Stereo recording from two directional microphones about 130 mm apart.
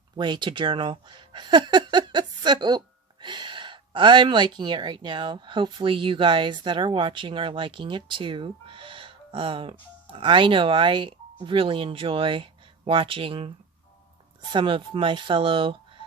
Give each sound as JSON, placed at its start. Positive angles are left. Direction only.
{"t": 0.2, "sound": "speech", "side_deg": -35}
{"t": 14.5, "sound": "speech", "side_deg": -40}